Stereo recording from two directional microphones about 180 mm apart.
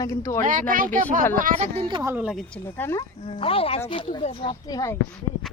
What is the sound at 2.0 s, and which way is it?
Speech, 15° right (ahead or behind).